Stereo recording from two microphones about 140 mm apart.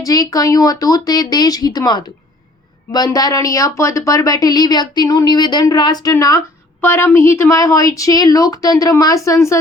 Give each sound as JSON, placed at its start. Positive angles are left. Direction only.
{"t": 0.0, "sound": "speech", "side_deg": 25}